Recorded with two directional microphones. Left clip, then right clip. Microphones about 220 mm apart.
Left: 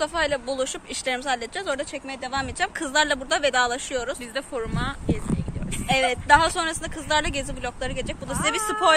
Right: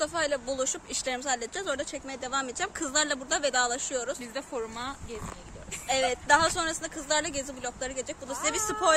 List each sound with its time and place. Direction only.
0.0 s speech: 5° right (ahead or behind)
4.4 s speech: 25° right (ahead or behind)
5.9 s speech: centre (ahead or behind)